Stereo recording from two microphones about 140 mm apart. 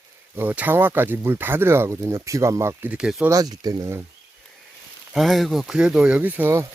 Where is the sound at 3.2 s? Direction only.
25° right (ahead or behind).